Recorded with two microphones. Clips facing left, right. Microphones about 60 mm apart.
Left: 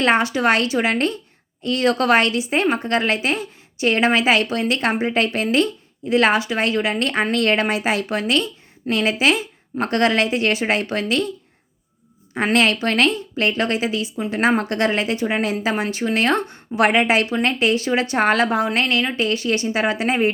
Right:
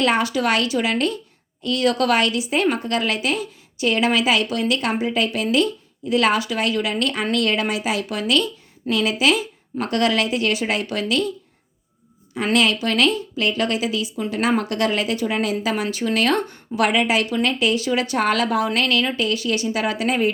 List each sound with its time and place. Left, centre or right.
0.0 s a woman's voice: left
12.5 s a woman's voice: left